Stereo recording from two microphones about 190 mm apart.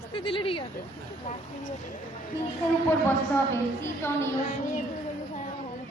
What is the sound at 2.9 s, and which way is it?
A woman's voice, 10° left (ahead or behind).